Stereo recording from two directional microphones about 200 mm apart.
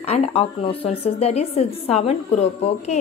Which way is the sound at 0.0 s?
30° left (ahead or behind).